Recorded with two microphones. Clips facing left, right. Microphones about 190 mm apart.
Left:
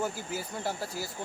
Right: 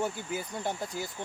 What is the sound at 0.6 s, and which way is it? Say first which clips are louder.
Speech: left 1 dB; 20° right (ahead or behind).